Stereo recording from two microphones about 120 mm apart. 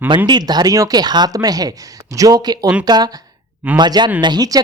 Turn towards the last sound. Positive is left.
turn(degrees=-35)  # may be behind; listen again after turning